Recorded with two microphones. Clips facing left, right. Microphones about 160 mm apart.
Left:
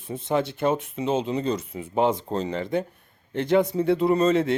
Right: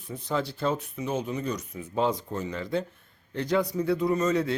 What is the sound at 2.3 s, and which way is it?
Speech, 65° left (ahead or behind).